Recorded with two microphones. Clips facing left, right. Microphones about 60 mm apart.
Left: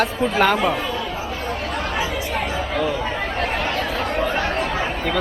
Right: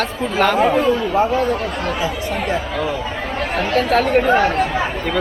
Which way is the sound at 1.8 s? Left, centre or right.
Right.